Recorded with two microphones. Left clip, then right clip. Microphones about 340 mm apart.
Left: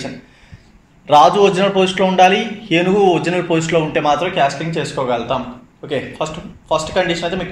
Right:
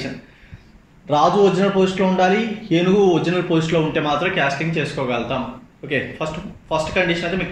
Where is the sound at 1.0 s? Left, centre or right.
Left.